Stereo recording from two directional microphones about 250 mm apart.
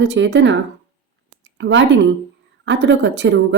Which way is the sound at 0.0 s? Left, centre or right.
Right.